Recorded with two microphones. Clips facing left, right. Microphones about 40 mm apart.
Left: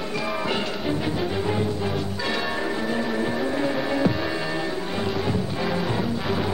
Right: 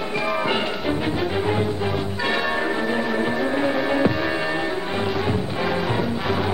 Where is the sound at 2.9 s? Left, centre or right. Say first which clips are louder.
Right 3 dB; right.